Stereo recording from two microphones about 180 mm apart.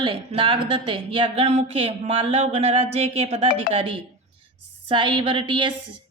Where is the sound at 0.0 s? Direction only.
30° right (ahead or behind).